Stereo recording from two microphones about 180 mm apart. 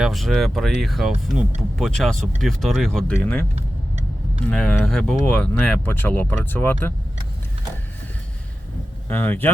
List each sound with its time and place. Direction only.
0.0 s speech: centre (ahead or behind)
3.5 s vehicle: 35° right (ahead or behind)
4.4 s speech: 5° left (ahead or behind)
9.0 s speech: 10° left (ahead or behind)